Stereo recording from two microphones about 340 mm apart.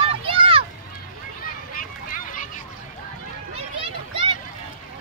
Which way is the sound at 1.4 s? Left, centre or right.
Left.